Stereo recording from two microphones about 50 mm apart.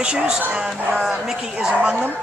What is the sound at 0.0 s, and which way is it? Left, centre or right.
A woman's voice, centre.